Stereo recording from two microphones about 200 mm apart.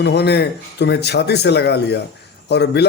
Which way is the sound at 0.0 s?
55° left (ahead or behind).